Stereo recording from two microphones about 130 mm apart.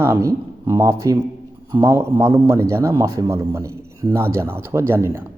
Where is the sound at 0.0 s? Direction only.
20° right (ahead or behind).